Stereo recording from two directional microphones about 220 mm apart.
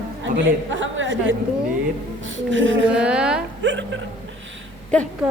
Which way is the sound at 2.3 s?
60° right (ahead or behind).